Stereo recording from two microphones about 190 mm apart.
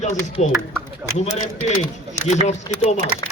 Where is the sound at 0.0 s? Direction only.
40° left (ahead or behind).